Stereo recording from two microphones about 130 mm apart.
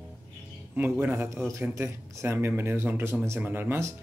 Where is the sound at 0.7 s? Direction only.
15° right (ahead or behind).